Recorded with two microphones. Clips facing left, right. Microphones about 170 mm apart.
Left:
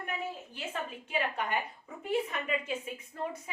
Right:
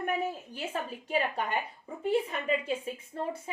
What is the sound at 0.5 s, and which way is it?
Speech, 35° right (ahead or behind).